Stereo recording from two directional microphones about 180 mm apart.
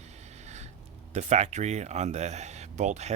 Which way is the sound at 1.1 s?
40° right (ahead or behind).